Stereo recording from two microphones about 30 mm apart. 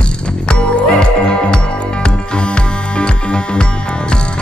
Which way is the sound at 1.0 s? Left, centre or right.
Left.